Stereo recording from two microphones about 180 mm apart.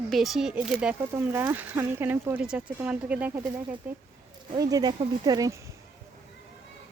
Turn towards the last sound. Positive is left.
turn(degrees=-20)  # may be behind; listen again after turning